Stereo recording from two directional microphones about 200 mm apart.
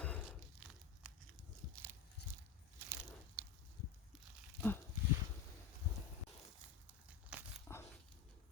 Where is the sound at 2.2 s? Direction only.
55° left (ahead or behind).